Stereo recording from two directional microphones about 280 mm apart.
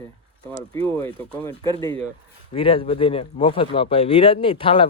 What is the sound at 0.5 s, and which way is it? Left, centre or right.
Speech, centre.